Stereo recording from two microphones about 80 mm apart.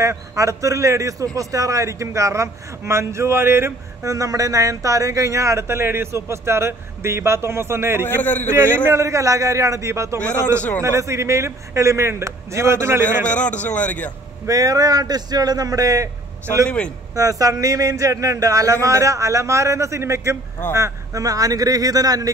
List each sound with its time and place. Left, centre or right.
0.0 s a man's voice: right
8.2 s a man's voice: left
8.7 s a man's voice: right
9.0 s a man's voice: right
13.2 s a man's voice: centre
14.5 s speech: right
16.6 s a man's voice: centre
17.1 s a man's voice: right